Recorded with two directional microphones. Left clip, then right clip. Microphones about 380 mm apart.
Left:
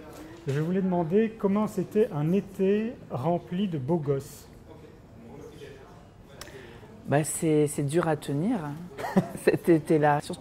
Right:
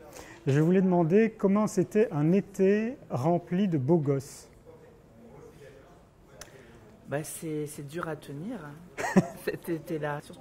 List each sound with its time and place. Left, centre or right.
0.5 s a man's voice: right
7.1 s speech: centre
8.9 s cough: right
9.4 s speech: centre